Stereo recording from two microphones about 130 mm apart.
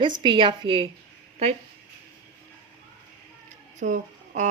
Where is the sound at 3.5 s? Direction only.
70° right (ahead or behind).